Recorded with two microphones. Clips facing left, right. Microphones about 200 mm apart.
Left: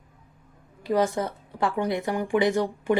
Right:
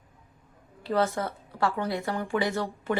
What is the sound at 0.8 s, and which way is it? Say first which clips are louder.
A woman's voice: left 3 dB; 15° left (ahead or behind).